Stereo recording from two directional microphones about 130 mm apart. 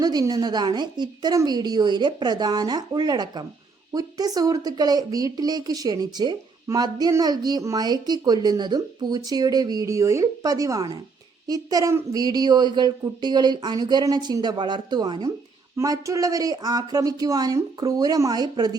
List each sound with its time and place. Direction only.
0.0 s speech: 30° right (ahead or behind)